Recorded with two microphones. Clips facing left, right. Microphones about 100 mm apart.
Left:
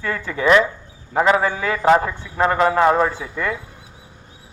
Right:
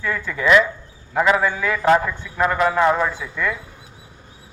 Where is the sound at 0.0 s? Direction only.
45° left (ahead or behind).